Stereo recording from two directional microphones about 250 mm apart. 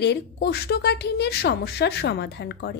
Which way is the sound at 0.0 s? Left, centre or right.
Left.